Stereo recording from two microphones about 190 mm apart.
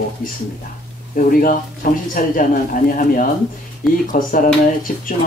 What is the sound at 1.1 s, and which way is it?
Speech, 45° left (ahead or behind).